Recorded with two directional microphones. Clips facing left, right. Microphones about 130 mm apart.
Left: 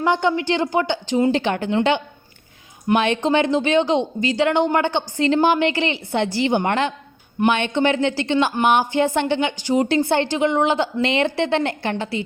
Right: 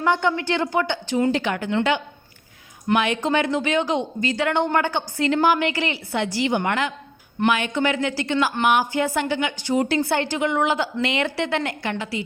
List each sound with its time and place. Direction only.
0.0 s speech: 20° left (ahead or behind)